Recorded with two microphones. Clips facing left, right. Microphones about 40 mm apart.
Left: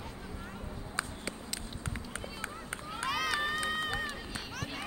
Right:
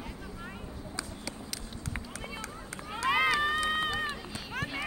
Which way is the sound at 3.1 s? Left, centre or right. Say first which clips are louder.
Right 6 dB; right.